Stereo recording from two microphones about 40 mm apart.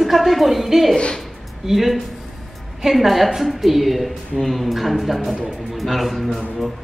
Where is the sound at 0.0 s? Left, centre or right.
Centre.